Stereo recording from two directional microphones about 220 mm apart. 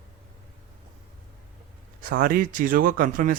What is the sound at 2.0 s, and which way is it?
Speech, 40° right (ahead or behind).